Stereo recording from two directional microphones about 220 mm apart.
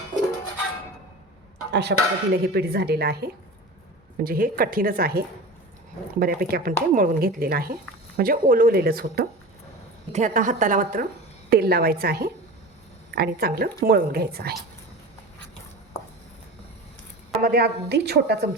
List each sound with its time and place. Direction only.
1.7 s a woman's voice: 50° right (ahead or behind)
10.1 s a woman's voice: 35° right (ahead or behind)
17.4 s speech: 45° right (ahead or behind)